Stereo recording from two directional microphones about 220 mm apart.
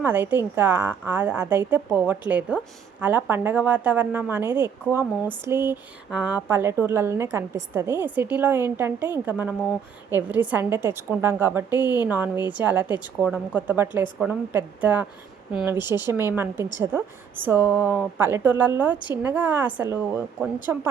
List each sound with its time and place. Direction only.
0.0 s a woman's voice: 10° right (ahead or behind)
11.7 s speech: 15° left (ahead or behind)
12.0 s a woman's voice: 10° right (ahead or behind)